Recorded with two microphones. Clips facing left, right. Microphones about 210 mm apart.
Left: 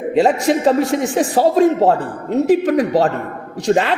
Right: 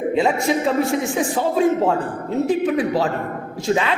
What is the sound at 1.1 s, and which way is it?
Speech, 35° left (ahead or behind).